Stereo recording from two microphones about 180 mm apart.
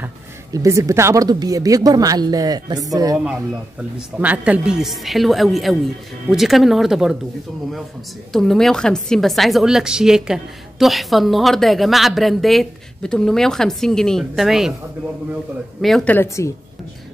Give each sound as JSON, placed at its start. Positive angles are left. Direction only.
{"t": 0.0, "sound": "speech", "side_deg": -15}
{"t": 4.2, "sound": "a woman's voice", "side_deg": -10}
{"t": 8.3, "sound": "a woman's voice", "side_deg": 0}
{"t": 15.8, "sound": "a woman's voice", "side_deg": 5}